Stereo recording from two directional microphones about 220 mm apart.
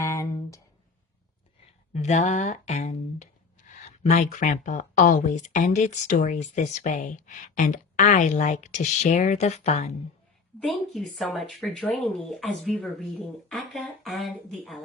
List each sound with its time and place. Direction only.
0.0 s a sound: 15° left (ahead or behind)
1.9 s speech: 30° left (ahead or behind)
10.6 s speech: centre (ahead or behind)